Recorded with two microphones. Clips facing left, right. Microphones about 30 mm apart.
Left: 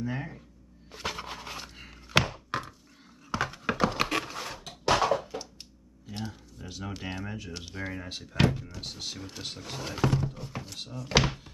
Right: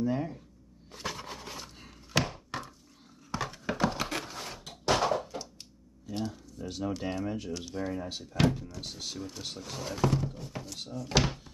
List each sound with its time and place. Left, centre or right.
0.0 s speech: left
1.0 s dog: left
2.0 s a sound: left
2.2 s thunk: left
3.3 s a sound: left
3.9 s a sound: left
7.5 s speech: left
8.1 s speech: left
10.3 s speech: left
11.2 s thunk: left